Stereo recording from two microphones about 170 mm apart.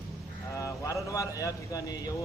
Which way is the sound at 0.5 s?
20° left (ahead or behind).